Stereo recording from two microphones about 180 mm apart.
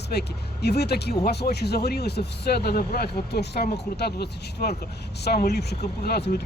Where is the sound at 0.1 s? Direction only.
65° left (ahead or behind).